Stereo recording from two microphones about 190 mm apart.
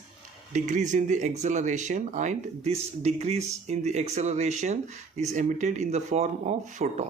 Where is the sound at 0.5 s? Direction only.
40° right (ahead or behind).